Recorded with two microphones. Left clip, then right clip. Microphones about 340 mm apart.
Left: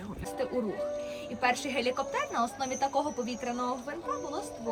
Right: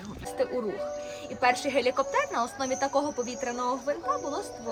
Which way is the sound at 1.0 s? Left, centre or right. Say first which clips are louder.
Right 5 dB; right.